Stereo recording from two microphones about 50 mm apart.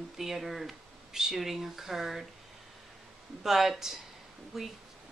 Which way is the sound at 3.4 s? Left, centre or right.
Centre.